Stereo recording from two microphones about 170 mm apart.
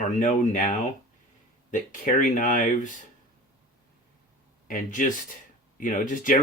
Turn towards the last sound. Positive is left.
turn(degrees=50)  # may be behind; listen again after turning